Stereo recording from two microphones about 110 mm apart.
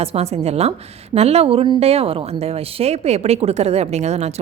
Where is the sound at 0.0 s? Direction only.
70° right (ahead or behind).